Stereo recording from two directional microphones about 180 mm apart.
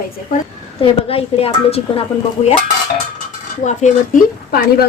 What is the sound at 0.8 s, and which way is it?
A woman's voice, 35° left (ahead or behind).